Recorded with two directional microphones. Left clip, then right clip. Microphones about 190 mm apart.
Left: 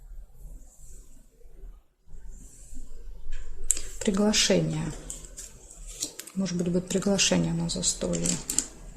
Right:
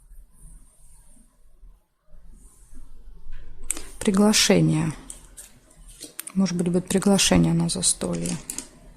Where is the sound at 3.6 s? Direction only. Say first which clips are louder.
Right 2 dB; 30° right (ahead or behind).